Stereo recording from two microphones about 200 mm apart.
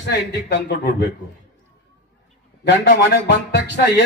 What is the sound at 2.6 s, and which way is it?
Speech, 55° left (ahead or behind).